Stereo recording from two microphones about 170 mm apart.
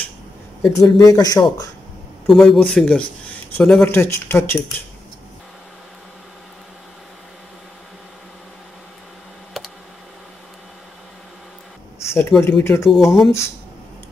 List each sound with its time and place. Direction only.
0.7 s speech: 20° left (ahead or behind)
2.2 s a man's voice: centre (ahead or behind)
12.1 s speech: 15° left (ahead or behind)
12.9 s a man's voice: centre (ahead or behind)